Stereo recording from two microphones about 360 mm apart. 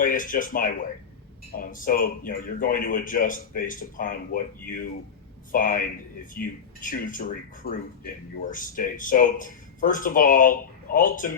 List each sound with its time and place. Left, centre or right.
0.0 s a man's voice: left